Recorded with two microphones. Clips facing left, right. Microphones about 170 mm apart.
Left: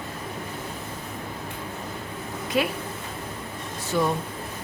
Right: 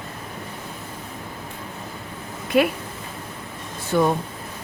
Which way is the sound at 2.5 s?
60° right (ahead or behind).